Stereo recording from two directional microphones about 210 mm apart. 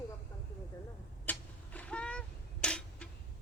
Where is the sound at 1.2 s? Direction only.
5° left (ahead or behind).